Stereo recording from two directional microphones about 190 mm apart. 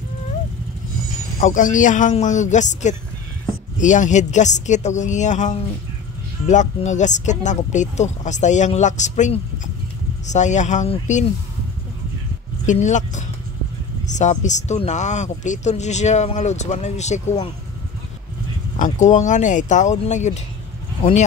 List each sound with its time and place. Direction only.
1.4 s speech: 40° left (ahead or behind)
12.6 s speech: 40° left (ahead or behind)
18.8 s speech: 40° left (ahead or behind)